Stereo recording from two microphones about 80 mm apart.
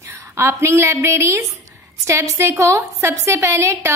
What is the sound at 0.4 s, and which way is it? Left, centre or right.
A woman's voice, right.